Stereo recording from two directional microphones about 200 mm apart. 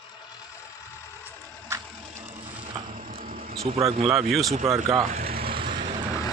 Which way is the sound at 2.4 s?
25° right (ahead or behind).